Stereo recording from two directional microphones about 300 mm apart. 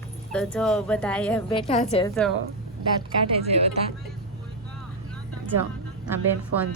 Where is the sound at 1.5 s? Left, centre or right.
Centre.